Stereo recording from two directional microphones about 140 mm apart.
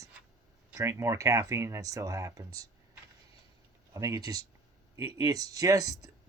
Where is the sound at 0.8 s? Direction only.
20° right (ahead or behind).